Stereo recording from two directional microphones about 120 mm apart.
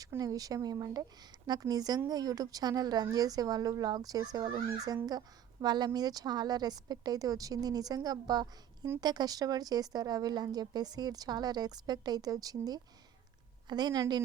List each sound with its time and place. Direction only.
0.2 s a woman's voice: 30° right (ahead or behind)